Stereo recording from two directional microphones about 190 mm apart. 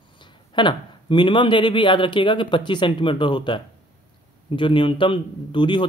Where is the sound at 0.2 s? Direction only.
25° left (ahead or behind).